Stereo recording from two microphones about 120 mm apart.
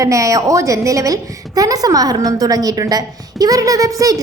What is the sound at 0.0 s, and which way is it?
A woman's voice, 25° right (ahead or behind).